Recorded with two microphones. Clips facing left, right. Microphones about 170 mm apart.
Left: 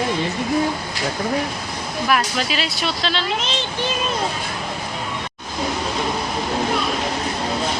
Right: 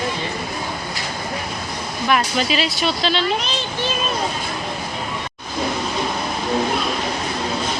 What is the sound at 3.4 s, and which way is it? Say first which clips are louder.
Speech: even; 20° left (ahead or behind).